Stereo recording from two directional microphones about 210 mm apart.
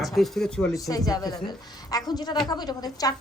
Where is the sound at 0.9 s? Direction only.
15° left (ahead or behind).